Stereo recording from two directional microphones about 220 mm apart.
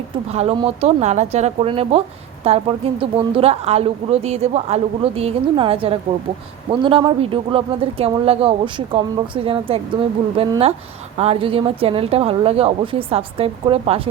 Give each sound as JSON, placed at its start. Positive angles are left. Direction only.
{"t": 0.3, "sound": "speech", "side_deg": -30}